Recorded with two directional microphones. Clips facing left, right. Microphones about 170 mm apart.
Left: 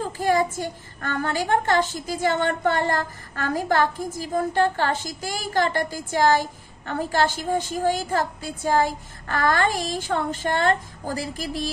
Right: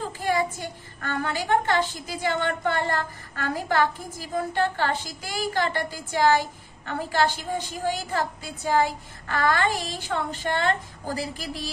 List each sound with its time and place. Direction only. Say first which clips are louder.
0.2 s a child's voice: left 4 dB; 45° left (ahead or behind)